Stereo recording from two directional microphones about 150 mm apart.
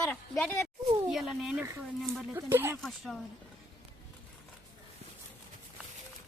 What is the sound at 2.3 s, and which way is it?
Speech, 15° right (ahead or behind).